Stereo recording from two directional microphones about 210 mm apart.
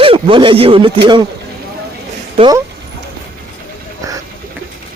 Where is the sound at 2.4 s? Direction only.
25° right (ahead or behind).